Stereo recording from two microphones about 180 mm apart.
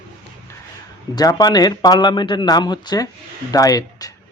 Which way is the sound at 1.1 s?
20° left (ahead or behind).